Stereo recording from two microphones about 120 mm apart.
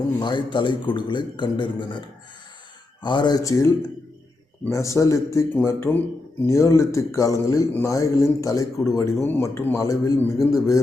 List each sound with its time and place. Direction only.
0.2 s a man's voice: 40° left (ahead or behind)
4.7 s speech: 25° left (ahead or behind)